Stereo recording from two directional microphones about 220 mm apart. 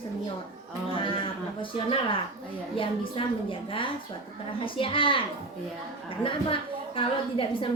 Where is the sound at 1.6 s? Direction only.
25° left (ahead or behind).